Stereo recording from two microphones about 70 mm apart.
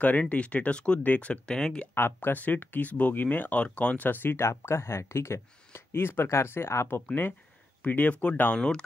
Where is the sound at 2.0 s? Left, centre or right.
Left.